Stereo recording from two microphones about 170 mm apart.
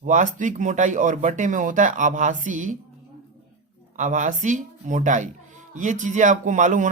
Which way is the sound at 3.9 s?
45° right (ahead or behind).